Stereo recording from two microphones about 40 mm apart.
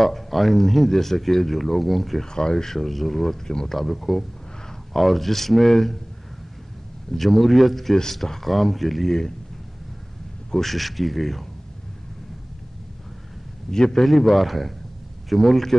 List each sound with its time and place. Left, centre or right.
0.0 s speech: centre
2.3 s speech: centre
3.4 s speech: centre
3.7 s speech: centre
7.1 s speech: centre
10.5 s speech: centre
13.7 s speech: centre
14.0 s speech: centre